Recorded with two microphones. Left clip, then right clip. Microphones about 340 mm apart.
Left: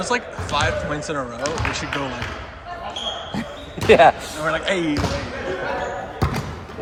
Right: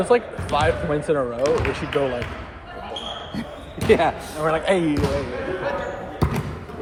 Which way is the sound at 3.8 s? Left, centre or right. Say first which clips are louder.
Left 6 dB; left.